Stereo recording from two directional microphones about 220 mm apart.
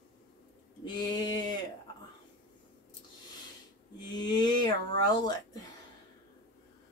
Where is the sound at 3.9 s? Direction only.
20° left (ahead or behind).